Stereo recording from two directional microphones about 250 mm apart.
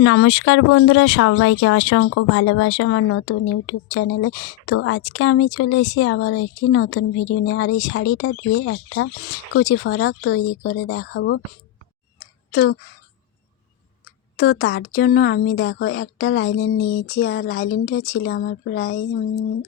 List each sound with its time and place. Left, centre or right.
0.0 s a woman's voice: left
12.5 s speech: left
14.3 s speech: left